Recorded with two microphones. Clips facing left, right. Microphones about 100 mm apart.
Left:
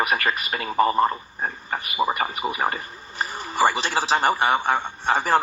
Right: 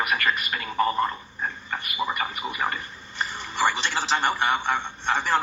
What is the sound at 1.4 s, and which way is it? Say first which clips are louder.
Speech: left 2 dB; 40° left (ahead or behind).